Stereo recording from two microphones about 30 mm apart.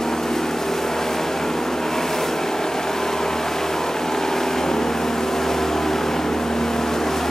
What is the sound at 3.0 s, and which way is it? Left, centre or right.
Vehicle, centre.